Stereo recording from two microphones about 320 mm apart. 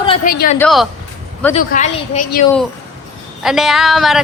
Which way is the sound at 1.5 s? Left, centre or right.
Left.